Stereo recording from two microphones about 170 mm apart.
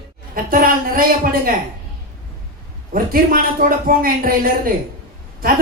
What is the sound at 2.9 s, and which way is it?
A man's voice, 55° right (ahead or behind).